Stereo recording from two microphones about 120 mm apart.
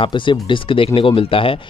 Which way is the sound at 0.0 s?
40° left (ahead or behind).